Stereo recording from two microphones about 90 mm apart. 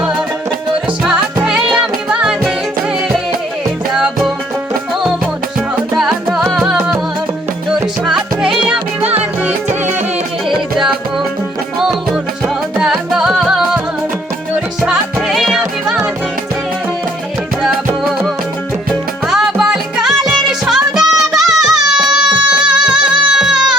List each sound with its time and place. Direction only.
1.5 s music: 10° right (ahead or behind)
3.9 s music: 5° right (ahead or behind)
6.5 s music: 5° right (ahead or behind)
10.5 s music: 5° right (ahead or behind)
18.9 s music: 5° right (ahead or behind)
21.9 s a sound: 10° right (ahead or behind)
22.5 s music: 10° right (ahead or behind)